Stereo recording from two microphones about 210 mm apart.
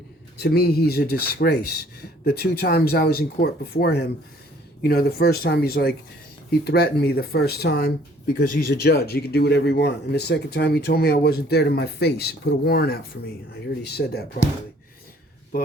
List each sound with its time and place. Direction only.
0.3 s speech: 50° left (ahead or behind)